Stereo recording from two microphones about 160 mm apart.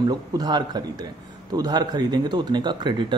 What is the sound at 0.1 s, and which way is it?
Speech, 25° right (ahead or behind).